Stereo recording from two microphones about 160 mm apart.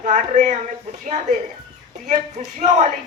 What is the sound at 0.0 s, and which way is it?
Speech, 50° right (ahead or behind).